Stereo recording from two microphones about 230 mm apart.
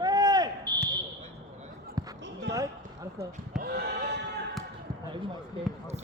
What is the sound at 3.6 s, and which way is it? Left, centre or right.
Horse, right.